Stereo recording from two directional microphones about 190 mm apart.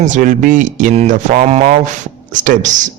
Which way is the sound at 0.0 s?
40° right (ahead or behind).